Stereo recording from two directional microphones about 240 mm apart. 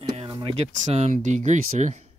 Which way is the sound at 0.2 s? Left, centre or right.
Right.